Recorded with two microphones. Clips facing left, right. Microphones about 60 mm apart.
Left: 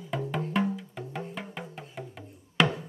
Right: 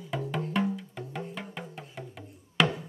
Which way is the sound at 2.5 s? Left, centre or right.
Centre.